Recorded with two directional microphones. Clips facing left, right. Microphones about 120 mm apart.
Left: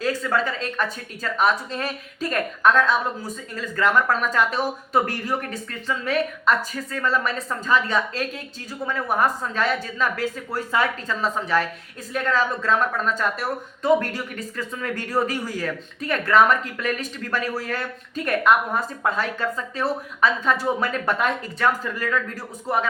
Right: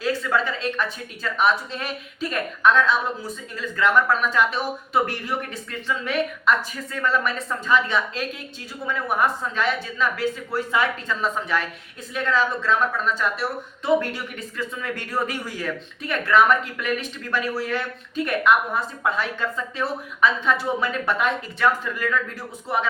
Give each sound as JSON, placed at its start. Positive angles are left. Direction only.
{"t": 0.0, "sound": "speech", "side_deg": 40}